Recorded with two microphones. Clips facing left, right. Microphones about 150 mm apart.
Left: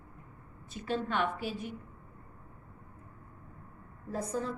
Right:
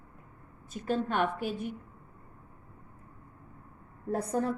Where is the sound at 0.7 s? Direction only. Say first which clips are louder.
Right 3 dB; 45° right (ahead or behind).